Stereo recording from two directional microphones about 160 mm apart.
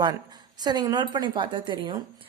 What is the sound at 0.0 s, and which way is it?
Speech, 25° right (ahead or behind).